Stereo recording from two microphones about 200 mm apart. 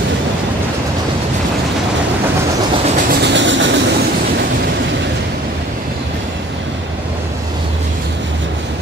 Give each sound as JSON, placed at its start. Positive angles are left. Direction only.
{"t": 3.1, "sound": "train", "side_deg": -60}